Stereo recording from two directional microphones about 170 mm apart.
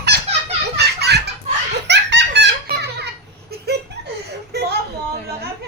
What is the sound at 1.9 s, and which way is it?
Giggle, 90° right.